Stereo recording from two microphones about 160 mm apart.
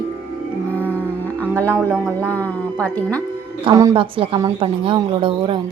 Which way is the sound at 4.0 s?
35° right (ahead or behind).